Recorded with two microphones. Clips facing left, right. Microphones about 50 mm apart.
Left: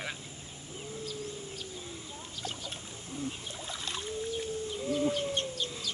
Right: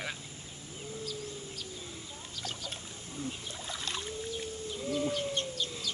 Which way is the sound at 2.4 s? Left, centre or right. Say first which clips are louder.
Left 1 dB; left.